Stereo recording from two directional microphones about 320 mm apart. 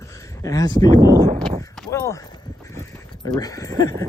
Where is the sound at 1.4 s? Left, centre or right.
Centre.